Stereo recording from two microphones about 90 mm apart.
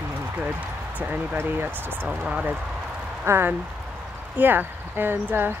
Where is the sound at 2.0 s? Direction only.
10° right (ahead or behind).